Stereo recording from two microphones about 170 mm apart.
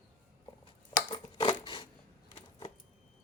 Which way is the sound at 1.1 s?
25° left (ahead or behind).